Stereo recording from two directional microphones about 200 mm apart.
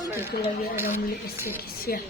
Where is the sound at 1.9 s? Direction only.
45° left (ahead or behind).